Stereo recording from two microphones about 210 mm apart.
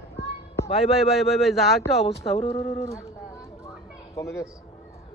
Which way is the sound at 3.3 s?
15° left (ahead or behind).